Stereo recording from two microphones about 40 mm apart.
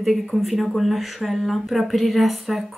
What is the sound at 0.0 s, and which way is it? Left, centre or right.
Speech, centre.